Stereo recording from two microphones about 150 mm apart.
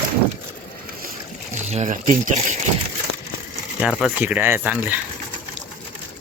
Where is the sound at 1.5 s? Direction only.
50° right (ahead or behind).